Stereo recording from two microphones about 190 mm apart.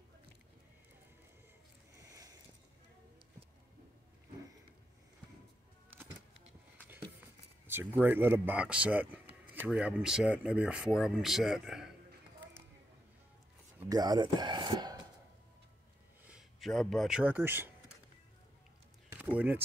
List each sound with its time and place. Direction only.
2.0 s a sound: 15° right (ahead or behind)
7.6 s speech: 10° right (ahead or behind)
13.8 s speech: 20° right (ahead or behind)
16.3 s speech: centre (ahead or behind)
19.0 s speech: 10° right (ahead or behind)